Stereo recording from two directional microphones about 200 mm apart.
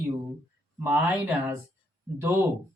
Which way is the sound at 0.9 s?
10° right (ahead or behind).